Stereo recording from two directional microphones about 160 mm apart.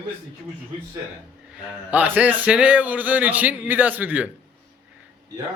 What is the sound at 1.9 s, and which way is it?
Speech, 10° right (ahead or behind).